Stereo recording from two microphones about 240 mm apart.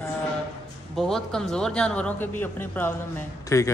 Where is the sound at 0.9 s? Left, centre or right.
Centre.